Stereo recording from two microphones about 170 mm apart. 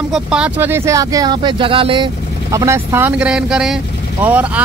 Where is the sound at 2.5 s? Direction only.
20° right (ahead or behind).